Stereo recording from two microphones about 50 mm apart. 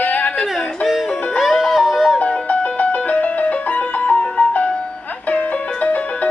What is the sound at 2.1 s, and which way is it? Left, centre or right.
Music, left.